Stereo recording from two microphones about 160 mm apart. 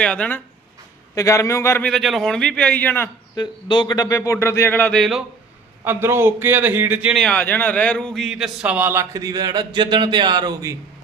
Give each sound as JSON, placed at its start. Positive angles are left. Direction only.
{"t": 0.0, "sound": "speech", "side_deg": 5}
{"t": 1.1, "sound": "speech", "side_deg": 20}
{"t": 1.9, "sound": "a man's voice", "side_deg": 0}
{"t": 3.3, "sound": "speech", "side_deg": 30}
{"t": 5.8, "sound": "a man's voice", "side_deg": -15}
{"t": 7.2, "sound": "a man's voice", "side_deg": 10}